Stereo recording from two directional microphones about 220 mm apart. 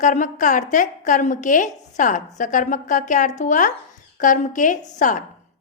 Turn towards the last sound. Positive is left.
turn(degrees=35)  # may be behind; listen again after turning